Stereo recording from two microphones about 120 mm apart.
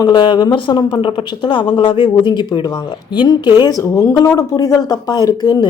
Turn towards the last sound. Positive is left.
turn(degrees=35)  # may be behind; listen again after turning